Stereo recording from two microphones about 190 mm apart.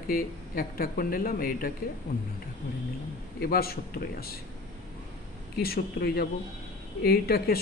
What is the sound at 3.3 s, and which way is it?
Speech, 55° left (ahead or behind).